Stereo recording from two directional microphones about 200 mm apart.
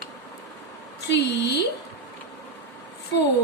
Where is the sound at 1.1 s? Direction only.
60° left (ahead or behind).